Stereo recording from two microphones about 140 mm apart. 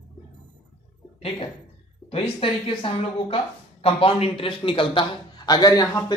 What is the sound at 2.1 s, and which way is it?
A man's voice, 40° left (ahead or behind).